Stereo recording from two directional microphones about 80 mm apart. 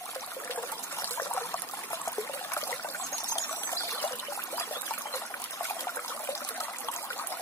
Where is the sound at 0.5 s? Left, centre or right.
Left.